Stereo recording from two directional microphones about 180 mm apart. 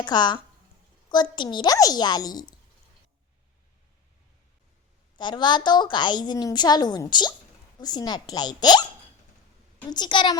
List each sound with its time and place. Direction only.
0.0 s a woman's voice: 25° left (ahead or behind)
5.1 s a woman's voice: 25° left (ahead or behind)
9.9 s a woman's voice: 25° left (ahead or behind)